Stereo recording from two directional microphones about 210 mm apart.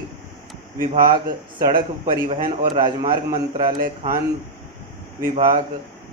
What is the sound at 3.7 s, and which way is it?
Speech, 40° right (ahead or behind).